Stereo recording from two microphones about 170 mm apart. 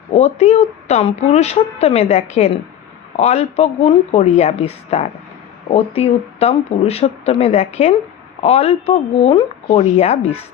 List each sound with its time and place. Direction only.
0.1 s speech: 40° left (ahead or behind)